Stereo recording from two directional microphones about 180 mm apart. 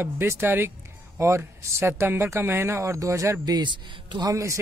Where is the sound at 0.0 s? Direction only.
15° right (ahead or behind).